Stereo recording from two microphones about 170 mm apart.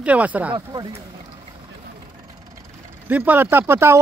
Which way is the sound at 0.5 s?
25° right (ahead or behind).